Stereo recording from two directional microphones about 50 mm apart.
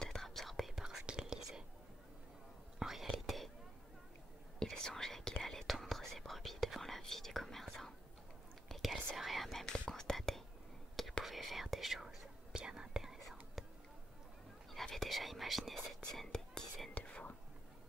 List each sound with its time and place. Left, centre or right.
0.0 s whispering: centre
0.7 s whispering: centre
2.8 s whispering: centre
4.6 s whispering: centre
14.7 s whispering: centre
16.9 s whispering: left